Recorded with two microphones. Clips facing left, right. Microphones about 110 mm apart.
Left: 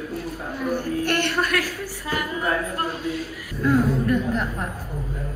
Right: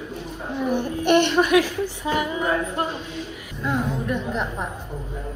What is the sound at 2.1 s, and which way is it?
Speech, centre (ahead or behind).